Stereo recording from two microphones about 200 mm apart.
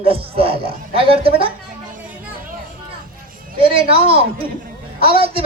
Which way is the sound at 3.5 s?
30° right (ahead or behind).